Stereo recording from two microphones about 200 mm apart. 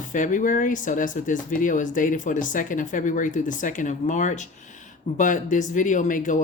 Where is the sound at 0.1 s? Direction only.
40° left (ahead or behind).